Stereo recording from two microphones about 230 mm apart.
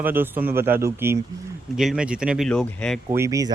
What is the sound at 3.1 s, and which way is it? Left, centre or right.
Speech, centre.